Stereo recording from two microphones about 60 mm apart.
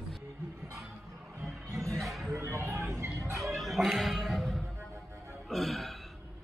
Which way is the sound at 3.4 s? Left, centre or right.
Centre.